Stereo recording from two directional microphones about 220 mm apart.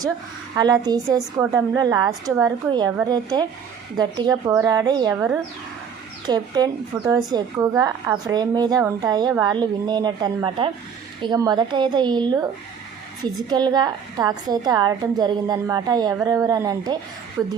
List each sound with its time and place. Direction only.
0.5 s a woman's voice: 20° right (ahead or behind)
13.5 s a woman's voice: 20° right (ahead or behind)